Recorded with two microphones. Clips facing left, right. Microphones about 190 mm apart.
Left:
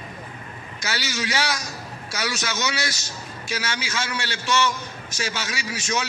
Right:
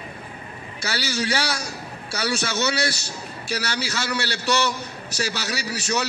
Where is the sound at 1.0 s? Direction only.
30° right (ahead or behind).